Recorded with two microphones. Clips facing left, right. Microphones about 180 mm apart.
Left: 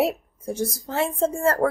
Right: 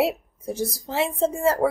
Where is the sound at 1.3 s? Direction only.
5° right (ahead or behind).